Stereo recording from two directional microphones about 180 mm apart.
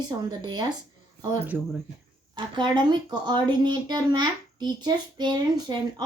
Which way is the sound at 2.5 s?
25° right (ahead or behind).